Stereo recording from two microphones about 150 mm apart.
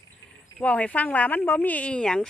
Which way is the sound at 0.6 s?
10° left (ahead or behind).